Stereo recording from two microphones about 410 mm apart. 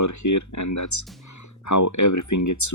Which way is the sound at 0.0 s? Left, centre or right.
Left.